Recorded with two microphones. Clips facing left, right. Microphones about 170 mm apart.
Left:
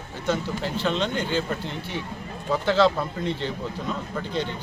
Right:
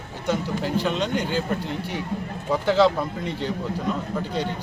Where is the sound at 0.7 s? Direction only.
10° right (ahead or behind).